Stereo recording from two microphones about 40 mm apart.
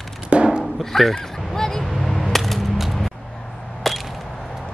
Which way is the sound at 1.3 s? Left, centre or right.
Centre.